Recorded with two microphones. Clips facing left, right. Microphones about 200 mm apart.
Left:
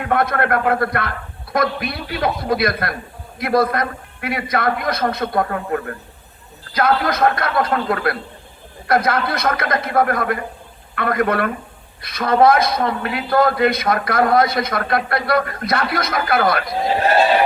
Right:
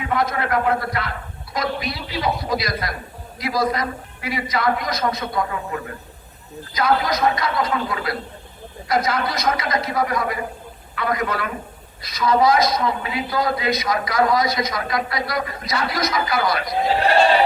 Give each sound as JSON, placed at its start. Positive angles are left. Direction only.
{"t": 0.0, "sound": "a man's voice", "side_deg": 60}